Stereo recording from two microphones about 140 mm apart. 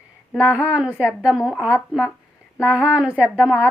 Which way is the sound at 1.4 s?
5° left (ahead or behind).